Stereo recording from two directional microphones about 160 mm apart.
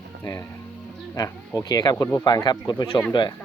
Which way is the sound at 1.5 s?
25° left (ahead or behind).